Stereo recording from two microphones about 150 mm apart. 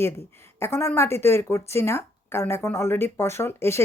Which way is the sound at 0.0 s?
15° left (ahead or behind).